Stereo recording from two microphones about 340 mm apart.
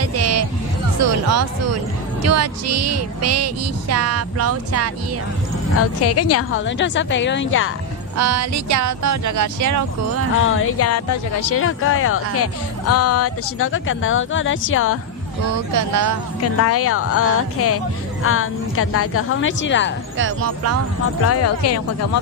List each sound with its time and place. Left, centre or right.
0.0 s music: right
1.3 s speech: right
5.8 s speech: left
8.1 s speech: right
10.3 s speech: left
15.4 s speech: right
16.4 s speech: left
20.1 s speech: right
21.2 s speech: left